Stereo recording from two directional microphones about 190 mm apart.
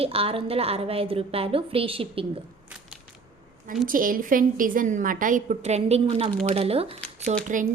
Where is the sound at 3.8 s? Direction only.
45° right (ahead or behind); by 6.9 s 30° right (ahead or behind).